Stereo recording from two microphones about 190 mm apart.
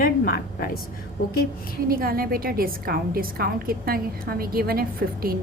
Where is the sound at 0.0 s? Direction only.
50° left (ahead or behind).